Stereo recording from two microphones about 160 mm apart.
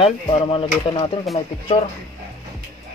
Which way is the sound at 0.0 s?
35° left (ahead or behind).